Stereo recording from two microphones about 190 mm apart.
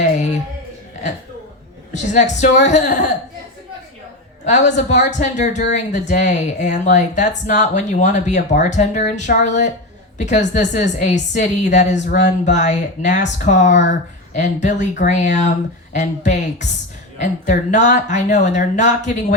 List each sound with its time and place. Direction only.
1.9 s a woman's voice: 40° left (ahead or behind)
4.4 s a woman's voice: 40° left (ahead or behind)